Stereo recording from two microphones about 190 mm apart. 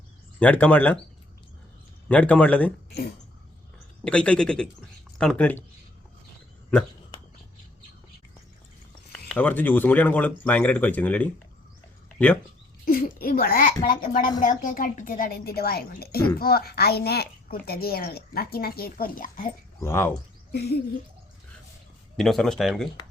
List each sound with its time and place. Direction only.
0.3 s speech: 5° left (ahead or behind)
2.0 s speech: 5° left (ahead or behind)
4.0 s speech: 5° left (ahead or behind)
9.1 s speech: 5° left (ahead or behind)
12.8 s speech: 50° left (ahead or behind)
19.8 s speech: 10° left (ahead or behind)
20.5 s speech: 55° left (ahead or behind)
22.2 s speech: centre (ahead or behind)